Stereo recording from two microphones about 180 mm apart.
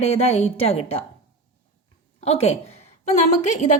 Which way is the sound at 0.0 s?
35° left (ahead or behind).